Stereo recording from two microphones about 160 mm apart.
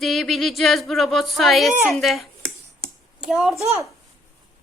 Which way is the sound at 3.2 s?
Centre (ahead or behind).